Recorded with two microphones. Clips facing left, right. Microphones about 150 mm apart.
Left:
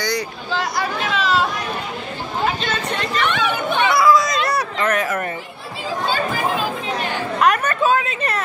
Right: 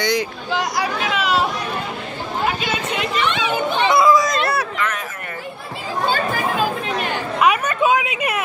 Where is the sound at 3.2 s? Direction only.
55° left (ahead or behind).